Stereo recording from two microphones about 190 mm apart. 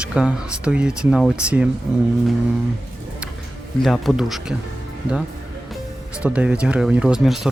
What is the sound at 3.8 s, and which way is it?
Speech, centre (ahead or behind).